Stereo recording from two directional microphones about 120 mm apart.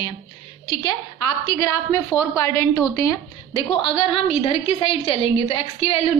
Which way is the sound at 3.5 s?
50° left (ahead or behind).